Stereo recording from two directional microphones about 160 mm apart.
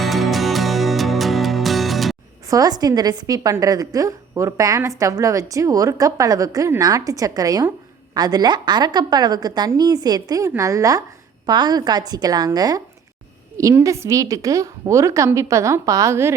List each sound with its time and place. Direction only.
0.0 s music: centre (ahead or behind)
2.5 s a woman's voice: 25° right (ahead or behind)